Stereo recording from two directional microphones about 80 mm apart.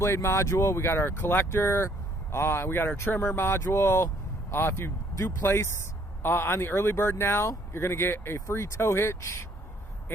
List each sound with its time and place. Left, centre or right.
0.0 s speech: left